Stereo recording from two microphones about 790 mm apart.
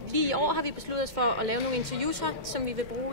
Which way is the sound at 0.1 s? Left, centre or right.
Right.